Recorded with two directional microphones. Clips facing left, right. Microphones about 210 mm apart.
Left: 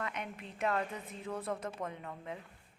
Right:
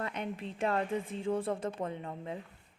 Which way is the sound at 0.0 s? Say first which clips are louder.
Right 4 dB; 30° right (ahead or behind).